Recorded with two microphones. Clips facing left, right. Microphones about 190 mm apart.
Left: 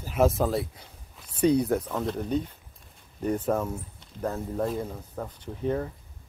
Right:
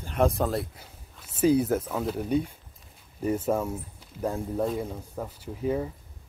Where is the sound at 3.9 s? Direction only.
10° right (ahead or behind).